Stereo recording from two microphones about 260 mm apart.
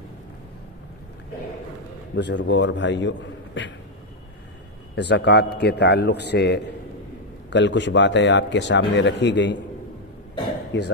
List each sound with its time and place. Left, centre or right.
2.1 s speech: left
4.9 s a man's voice: left
10.7 s speech: left